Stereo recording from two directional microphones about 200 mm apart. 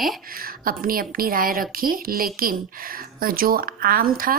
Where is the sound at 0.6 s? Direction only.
45° right (ahead or behind).